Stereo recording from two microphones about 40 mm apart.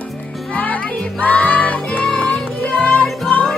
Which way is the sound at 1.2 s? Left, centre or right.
Left.